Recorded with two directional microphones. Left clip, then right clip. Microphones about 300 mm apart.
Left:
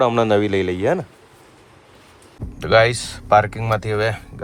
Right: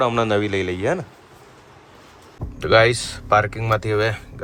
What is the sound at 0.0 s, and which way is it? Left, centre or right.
Speech, centre.